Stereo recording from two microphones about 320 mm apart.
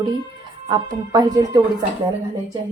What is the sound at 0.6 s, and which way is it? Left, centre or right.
Speech, centre.